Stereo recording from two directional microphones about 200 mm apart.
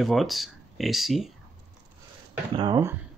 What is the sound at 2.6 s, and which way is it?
Speech, 20° right (ahead or behind).